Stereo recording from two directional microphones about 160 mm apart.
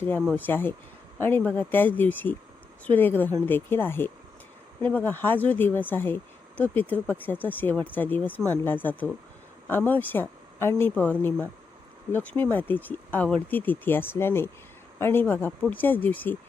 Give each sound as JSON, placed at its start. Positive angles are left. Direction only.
{"t": 0.3, "sound": "speech", "side_deg": 10}